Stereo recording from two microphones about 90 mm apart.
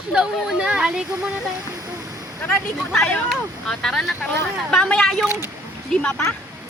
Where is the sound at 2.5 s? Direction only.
25° left (ahead or behind).